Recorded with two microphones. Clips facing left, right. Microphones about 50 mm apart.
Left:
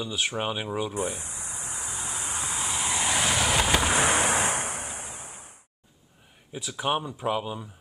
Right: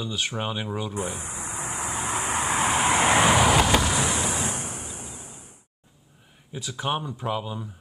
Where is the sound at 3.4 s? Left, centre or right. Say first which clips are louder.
Right 4 dB; centre.